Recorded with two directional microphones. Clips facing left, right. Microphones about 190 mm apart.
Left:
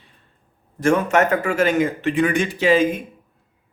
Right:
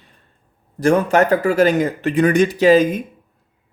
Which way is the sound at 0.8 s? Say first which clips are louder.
Right 3 dB; 35° right (ahead or behind).